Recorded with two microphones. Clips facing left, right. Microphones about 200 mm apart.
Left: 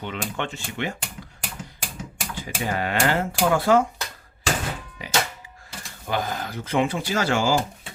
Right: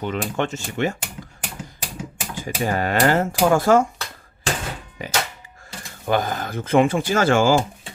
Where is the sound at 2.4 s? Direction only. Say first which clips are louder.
Right 4 dB; 45° right (ahead or behind).